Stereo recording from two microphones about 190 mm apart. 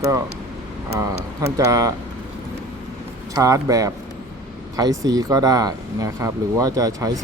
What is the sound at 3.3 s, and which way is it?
Speech, 20° right (ahead or behind).